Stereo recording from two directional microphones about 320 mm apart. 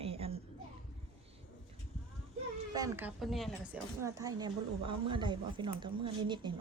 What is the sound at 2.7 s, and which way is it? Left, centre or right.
Speech, centre.